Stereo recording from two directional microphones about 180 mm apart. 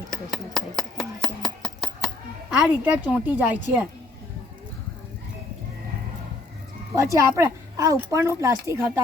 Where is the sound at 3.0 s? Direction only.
10° right (ahead or behind).